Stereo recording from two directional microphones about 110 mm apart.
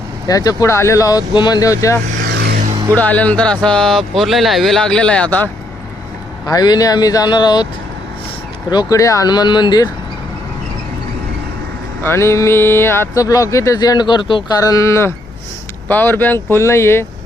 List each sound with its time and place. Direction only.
0.3 s speech: 30° left (ahead or behind)
3.0 s speech: 15° left (ahead or behind)
6.4 s speech: 35° left (ahead or behind)
8.7 s speech: 35° left (ahead or behind)
12.0 s speech: 25° left (ahead or behind); by 14.4 s 50° left (ahead or behind)
14.5 s speech: 35° left (ahead or behind)